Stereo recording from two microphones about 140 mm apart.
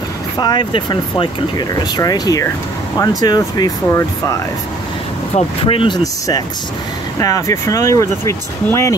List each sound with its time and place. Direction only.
0.4 s speech: 30° left (ahead or behind)
5.3 s speech: 40° left (ahead or behind)
7.2 s speech: 25° left (ahead or behind)